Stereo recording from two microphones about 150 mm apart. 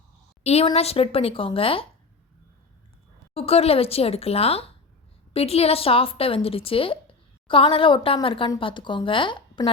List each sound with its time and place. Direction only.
0.4 s a woman's voice: 40° left (ahead or behind)
3.3 s a woman's voice: 40° left (ahead or behind)